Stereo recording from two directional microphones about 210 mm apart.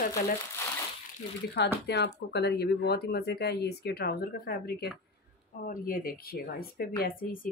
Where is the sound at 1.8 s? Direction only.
50° left (ahead or behind).